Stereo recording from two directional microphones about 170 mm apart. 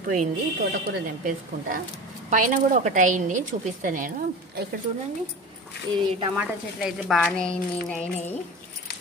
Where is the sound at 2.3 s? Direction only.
50° right (ahead or behind).